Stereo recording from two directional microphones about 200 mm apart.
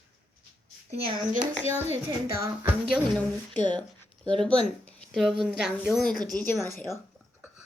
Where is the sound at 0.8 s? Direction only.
30° right (ahead or behind).